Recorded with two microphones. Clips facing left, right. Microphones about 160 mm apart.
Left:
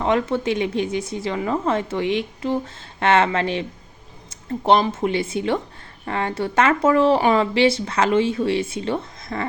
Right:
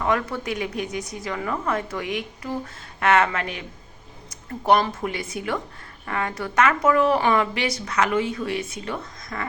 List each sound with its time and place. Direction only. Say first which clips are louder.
0.0 s speech: left 4 dB; 25° left (ahead or behind)